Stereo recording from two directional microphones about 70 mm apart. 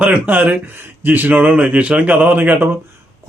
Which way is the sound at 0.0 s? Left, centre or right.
Right.